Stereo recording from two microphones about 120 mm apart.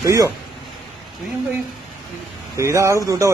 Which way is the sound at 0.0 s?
25° right (ahead or behind).